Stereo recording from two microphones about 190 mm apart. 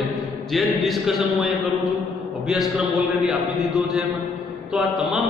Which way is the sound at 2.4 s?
Centre (ahead or behind).